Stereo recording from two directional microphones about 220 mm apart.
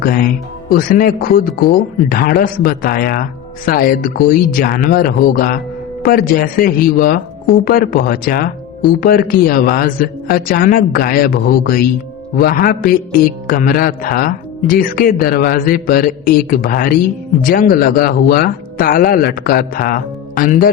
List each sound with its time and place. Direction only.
0.0 s a man's voice: 40° left (ahead or behind)